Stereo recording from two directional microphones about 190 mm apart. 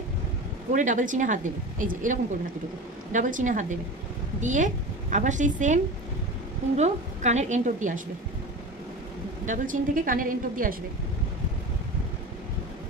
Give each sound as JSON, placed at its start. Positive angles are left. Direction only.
{"t": 0.7, "sound": "a woman's voice", "side_deg": -40}
{"t": 6.8, "sound": "a woman's voice", "side_deg": -35}
{"t": 9.5, "sound": "speech", "side_deg": -45}